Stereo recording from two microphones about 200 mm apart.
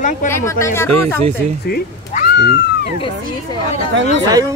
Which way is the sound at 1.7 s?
50° left (ahead or behind).